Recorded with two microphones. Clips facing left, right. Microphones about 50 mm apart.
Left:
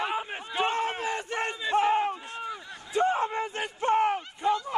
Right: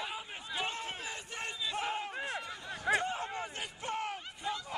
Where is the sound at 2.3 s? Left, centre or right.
Right.